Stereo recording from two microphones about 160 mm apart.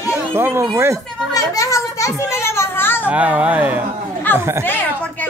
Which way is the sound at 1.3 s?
20° left (ahead or behind).